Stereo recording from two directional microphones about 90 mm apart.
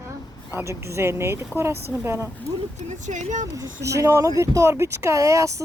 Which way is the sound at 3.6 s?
35° right (ahead or behind).